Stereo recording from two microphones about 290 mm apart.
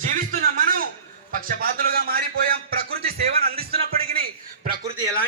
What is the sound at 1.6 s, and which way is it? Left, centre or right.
Music, right.